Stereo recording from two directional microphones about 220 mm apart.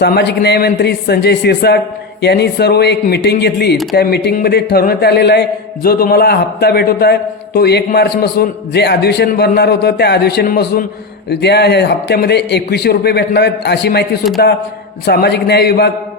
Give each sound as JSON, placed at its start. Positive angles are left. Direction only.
{"t": 0.0, "sound": "speech", "side_deg": 50}